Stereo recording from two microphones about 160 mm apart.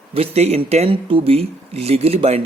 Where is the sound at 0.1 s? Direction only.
40° right (ahead or behind).